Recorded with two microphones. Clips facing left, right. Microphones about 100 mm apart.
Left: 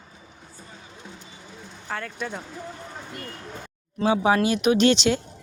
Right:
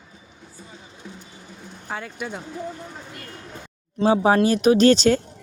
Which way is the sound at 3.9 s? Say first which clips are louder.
Right 3 dB; 35° right (ahead or behind).